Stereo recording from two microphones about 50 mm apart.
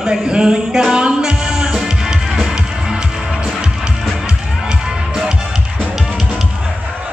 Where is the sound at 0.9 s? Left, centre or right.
Centre.